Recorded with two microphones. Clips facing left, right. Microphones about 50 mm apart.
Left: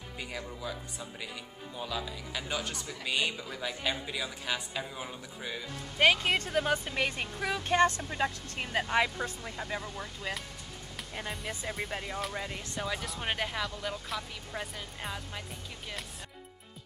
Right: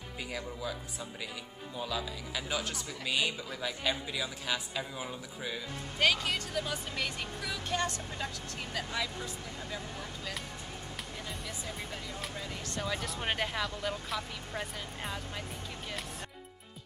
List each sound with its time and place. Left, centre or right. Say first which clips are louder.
0.3 s speech: right 1 dB; centre
1.8 s speech: even; centre
5.9 s speech: left 4 dB; left
12.7 s speech: even; centre